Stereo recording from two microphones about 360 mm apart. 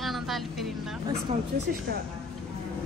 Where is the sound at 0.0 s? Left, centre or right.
Centre.